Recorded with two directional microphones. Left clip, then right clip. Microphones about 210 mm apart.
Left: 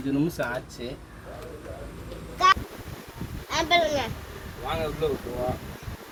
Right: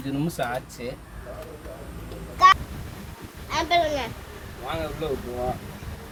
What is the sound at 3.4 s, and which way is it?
Speech, 20° left (ahead or behind).